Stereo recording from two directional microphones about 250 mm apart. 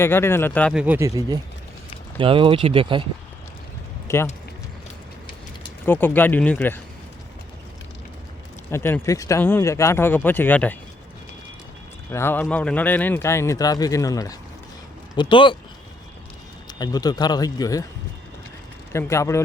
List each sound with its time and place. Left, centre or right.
0.0 s speech: centre; by 3.0 s right
4.1 s speech: centre
5.8 s a man's voice: centre
8.7 s a man's voice: centre
12.1 s a man's voice: centre
16.6 s a man's voice: centre
18.9 s a man's voice: centre